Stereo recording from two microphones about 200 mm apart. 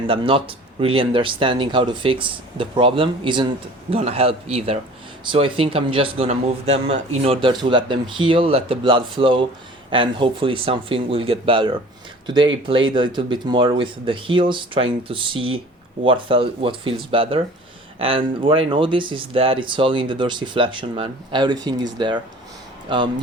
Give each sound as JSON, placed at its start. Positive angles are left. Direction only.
{"t": 0.1, "sound": "speech", "side_deg": -25}